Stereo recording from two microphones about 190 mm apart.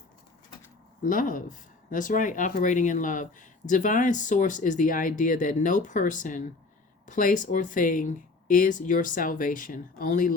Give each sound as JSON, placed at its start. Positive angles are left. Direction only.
{"t": 1.0, "sound": "speech", "side_deg": 45}